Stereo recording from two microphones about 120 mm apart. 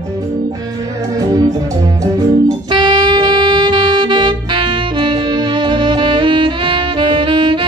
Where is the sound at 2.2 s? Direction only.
35° right (ahead or behind).